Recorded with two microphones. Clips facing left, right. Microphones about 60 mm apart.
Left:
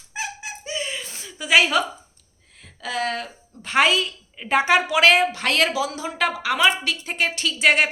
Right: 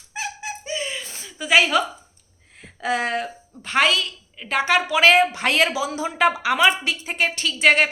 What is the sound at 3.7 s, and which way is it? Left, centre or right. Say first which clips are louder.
Speech: left 1 dB; centre.